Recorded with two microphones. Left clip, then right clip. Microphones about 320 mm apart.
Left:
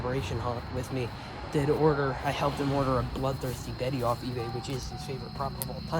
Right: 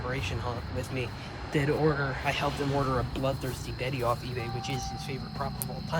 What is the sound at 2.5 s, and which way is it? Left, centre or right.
Speech, left.